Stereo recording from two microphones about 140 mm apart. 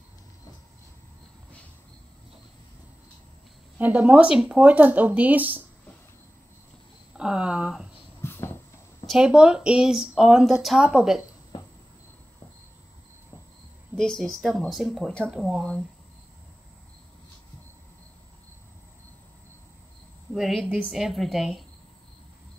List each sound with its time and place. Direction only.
3.7 s speech: 10° right (ahead or behind)
7.2 s speech: 5° right (ahead or behind)
8.2 s a sound: 15° left (ahead or behind)
9.0 s speech: 5° right (ahead or behind)
13.9 s speech: 5° left (ahead or behind)
20.3 s speech: centre (ahead or behind)